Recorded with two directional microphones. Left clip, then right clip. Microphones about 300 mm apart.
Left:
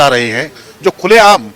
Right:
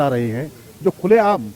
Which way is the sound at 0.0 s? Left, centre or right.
Centre.